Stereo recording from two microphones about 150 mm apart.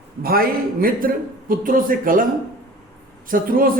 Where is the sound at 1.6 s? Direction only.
65° right (ahead or behind).